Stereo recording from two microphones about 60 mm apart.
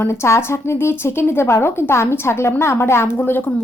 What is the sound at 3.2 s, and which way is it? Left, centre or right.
Speech, left.